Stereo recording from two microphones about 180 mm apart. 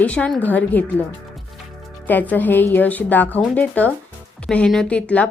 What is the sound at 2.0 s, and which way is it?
A woman's voice, 10° left (ahead or behind).